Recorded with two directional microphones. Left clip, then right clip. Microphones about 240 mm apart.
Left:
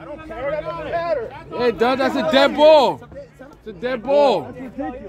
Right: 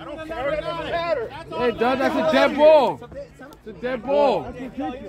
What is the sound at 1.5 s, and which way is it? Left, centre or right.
Speech, left.